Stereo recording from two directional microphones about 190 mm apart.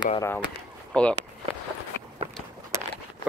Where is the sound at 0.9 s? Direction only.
5° left (ahead or behind).